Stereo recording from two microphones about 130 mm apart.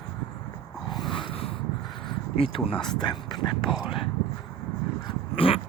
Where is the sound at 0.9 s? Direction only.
35° left (ahead or behind).